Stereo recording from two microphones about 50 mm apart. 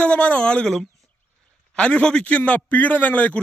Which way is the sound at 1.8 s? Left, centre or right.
Left.